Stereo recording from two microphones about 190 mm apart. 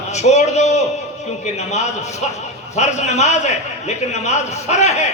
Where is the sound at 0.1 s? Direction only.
35° left (ahead or behind).